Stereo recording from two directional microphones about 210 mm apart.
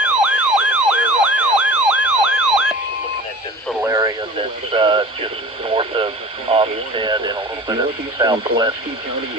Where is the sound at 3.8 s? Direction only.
15° right (ahead or behind).